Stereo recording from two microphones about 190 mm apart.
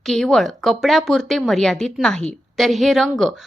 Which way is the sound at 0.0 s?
Centre (ahead or behind).